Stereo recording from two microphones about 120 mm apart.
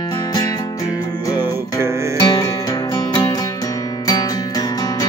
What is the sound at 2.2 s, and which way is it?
Music, 30° left (ahead or behind).